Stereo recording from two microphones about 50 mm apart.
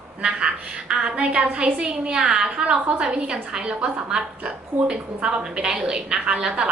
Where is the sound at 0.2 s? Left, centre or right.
Right.